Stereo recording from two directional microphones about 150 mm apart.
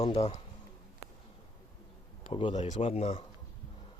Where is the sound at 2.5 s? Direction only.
45° left (ahead or behind).